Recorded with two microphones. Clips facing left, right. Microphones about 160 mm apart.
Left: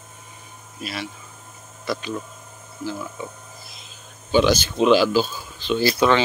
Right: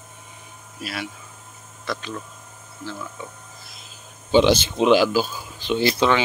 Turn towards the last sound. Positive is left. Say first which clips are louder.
# left 1 dB
turn(degrees=-20)  # may be behind; listen again after turning